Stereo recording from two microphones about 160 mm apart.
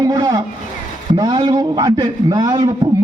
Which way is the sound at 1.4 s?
25° right (ahead or behind).